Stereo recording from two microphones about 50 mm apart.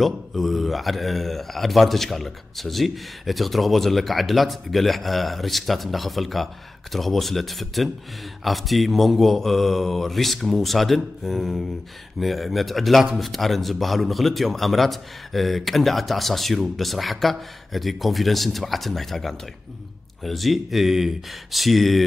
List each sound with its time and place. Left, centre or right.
0.0 s speech: centre